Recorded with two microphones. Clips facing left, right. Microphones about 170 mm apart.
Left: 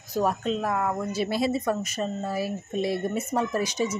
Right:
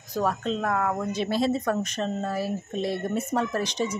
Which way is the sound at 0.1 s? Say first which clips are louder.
Left 1 dB; 10° left (ahead or behind).